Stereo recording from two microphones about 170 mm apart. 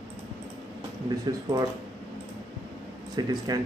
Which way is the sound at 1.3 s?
20° right (ahead or behind).